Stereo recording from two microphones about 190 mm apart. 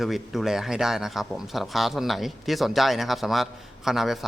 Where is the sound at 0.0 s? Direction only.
Centre (ahead or behind).